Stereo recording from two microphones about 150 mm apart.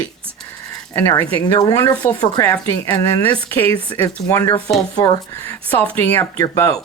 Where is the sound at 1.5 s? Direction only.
25° left (ahead or behind).